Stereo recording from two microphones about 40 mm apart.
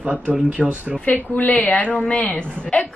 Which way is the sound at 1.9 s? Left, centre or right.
Left.